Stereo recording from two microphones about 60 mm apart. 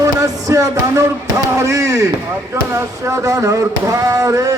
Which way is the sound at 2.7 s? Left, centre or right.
Right.